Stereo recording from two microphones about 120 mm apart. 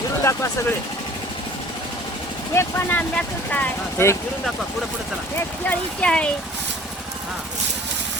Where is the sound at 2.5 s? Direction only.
20° left (ahead or behind).